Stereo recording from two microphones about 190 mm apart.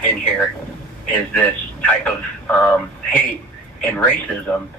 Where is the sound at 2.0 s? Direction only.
5° left (ahead or behind).